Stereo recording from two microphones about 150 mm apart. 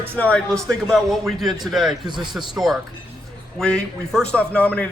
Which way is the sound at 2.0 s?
30° right (ahead or behind).